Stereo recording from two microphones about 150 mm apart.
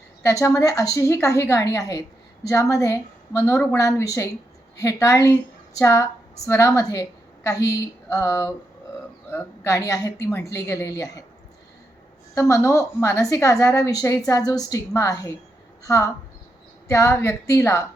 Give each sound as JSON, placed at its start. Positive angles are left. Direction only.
{"t": 0.2, "sound": "a woman's voice", "side_deg": 20}
{"t": 12.3, "sound": "a woman's voice", "side_deg": 20}